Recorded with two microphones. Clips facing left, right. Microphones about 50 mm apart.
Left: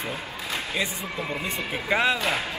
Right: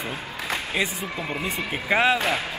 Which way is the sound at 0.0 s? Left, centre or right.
Right.